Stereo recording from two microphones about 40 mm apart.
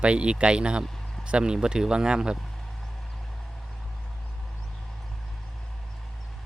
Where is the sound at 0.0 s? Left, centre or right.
Right.